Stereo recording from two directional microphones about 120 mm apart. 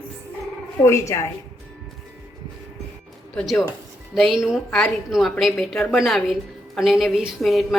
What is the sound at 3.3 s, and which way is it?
A woman's voice, centre (ahead or behind).